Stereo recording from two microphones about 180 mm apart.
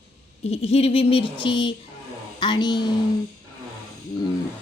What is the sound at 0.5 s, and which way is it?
A woman's voice, 35° left (ahead or behind).